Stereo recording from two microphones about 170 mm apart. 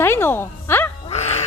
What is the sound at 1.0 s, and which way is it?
Music, 40° left (ahead or behind).